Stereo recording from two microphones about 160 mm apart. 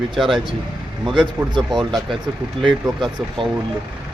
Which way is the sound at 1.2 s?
30° right (ahead or behind).